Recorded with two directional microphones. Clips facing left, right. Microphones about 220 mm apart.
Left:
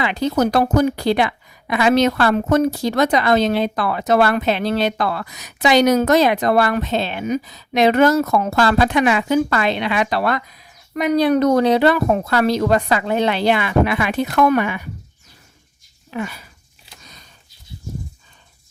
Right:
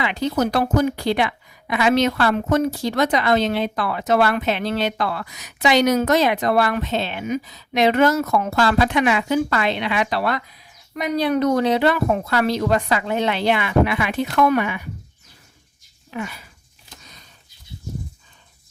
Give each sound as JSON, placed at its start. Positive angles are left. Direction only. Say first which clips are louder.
{"t": 0.0, "sound": "a woman's voice", "louder": "left 3 dB", "side_deg": 40}
{"t": 16.1, "sound": "a woman's voice", "louder": "left 3 dB", "side_deg": 35}